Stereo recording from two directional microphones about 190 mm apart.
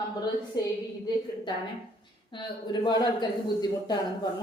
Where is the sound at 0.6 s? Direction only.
20° left (ahead or behind).